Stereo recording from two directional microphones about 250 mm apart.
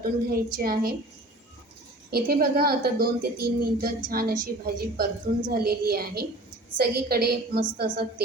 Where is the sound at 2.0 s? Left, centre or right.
Right.